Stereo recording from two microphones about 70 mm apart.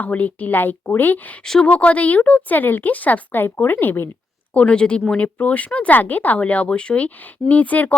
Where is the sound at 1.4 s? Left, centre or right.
Centre; by 4.1 s left.